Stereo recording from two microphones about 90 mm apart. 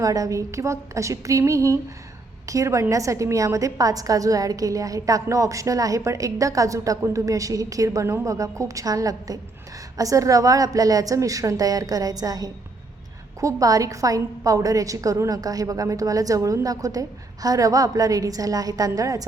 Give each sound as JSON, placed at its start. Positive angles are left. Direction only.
{"t": 0.0, "sound": "a woman's voice", "side_deg": -40}